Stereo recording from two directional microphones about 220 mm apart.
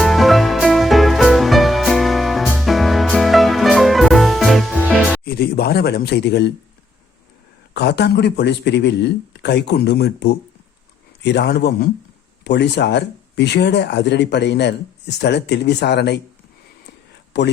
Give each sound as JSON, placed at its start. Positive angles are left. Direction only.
{"t": 0.0, "sound": "music", "side_deg": 0}
{"t": 5.2, "sound": "speech", "side_deg": 45}
{"t": 7.7, "sound": "speech", "side_deg": 50}
{"t": 17.3, "sound": "speech", "side_deg": 50}